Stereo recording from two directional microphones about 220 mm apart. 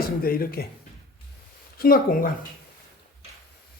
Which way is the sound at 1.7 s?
40° left (ahead or behind).